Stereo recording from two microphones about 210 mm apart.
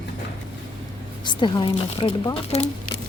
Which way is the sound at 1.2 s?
20° left (ahead or behind).